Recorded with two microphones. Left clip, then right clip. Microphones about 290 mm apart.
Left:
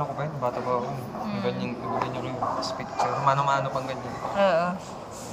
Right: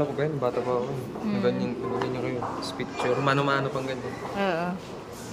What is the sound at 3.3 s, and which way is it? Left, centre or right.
A man's voice, right.